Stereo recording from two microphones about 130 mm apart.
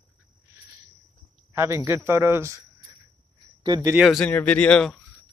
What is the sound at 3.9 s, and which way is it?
Speech, centre (ahead or behind).